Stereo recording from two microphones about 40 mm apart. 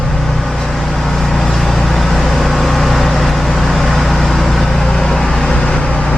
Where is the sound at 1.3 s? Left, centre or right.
Centre.